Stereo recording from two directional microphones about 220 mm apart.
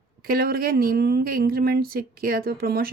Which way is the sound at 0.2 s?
40° right (ahead or behind).